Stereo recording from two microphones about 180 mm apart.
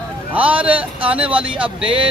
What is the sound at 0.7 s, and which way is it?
Speech, 30° right (ahead or behind).